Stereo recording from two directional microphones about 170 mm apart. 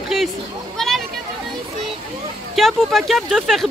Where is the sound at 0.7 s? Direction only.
Centre (ahead or behind).